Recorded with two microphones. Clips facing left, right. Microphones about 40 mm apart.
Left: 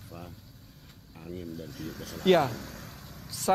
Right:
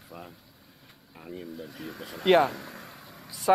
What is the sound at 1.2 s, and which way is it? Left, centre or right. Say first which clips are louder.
Speech: even; centre.